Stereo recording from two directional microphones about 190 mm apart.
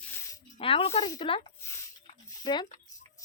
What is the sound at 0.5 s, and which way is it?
Speech, 30° left (ahead or behind).